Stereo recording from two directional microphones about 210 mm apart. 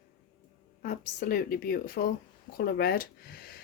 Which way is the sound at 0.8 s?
45° left (ahead or behind).